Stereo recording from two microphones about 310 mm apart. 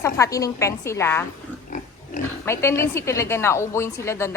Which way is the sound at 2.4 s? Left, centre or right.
Centre.